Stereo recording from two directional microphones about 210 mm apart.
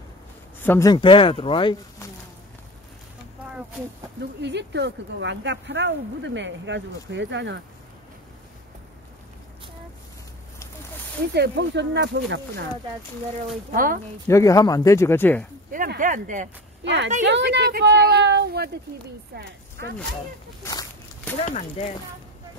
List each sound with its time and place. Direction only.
0.6 s speech: 10° left (ahead or behind)
0.9 s speech: 25° left (ahead or behind)
4.4 s speech: 55° right (ahead or behind)
11.3 s speech: 55° right (ahead or behind)
13.5 s speech: 40° right (ahead or behind)
14.2 s speech: 15° left (ahead or behind)
15.7 s speech: 40° right (ahead or behind)
17.2 s speech: 55° right (ahead or behind)
20.6 s a sound: 10° left (ahead or behind)
21.5 s speech: 35° left (ahead or behind)